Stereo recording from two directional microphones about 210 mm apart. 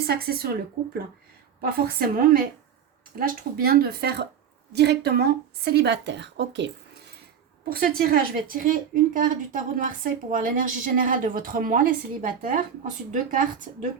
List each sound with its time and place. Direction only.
0.1 s a woman's voice: 45° right (ahead or behind)
1.7 s a woman's voice: 45° right (ahead or behind)
7.6 s a woman's voice: 45° right (ahead or behind)